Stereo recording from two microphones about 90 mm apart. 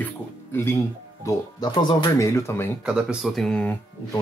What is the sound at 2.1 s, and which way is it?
Speech, 35° left (ahead or behind).